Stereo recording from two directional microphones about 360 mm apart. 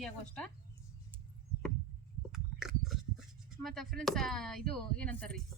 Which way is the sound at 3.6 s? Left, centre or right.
Centre.